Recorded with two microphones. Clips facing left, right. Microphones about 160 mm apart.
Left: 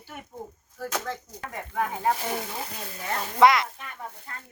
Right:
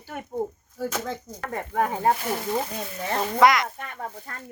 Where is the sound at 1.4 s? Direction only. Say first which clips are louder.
Right 4 dB; 45° right (ahead or behind).